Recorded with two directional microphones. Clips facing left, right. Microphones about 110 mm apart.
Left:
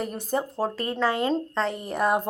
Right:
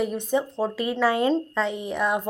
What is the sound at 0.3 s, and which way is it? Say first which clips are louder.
Speech: left 1 dB; 5° left (ahead or behind).